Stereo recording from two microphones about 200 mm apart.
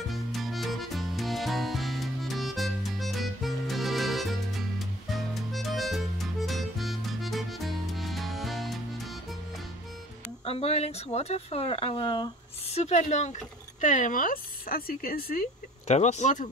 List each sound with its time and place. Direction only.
0.1 s music: centre (ahead or behind)
10.4 s speech: 30° left (ahead or behind); by 15.4 s 50° left (ahead or behind)
15.9 s speech: 35° left (ahead or behind)